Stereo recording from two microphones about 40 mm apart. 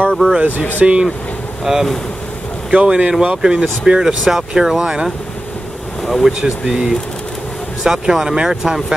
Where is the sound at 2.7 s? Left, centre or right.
Right.